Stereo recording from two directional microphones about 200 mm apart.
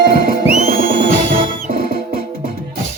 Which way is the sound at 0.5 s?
40° right (ahead or behind).